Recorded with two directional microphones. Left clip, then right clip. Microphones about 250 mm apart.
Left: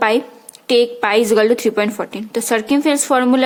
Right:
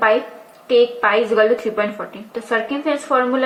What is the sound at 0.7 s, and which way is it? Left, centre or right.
Speech, left.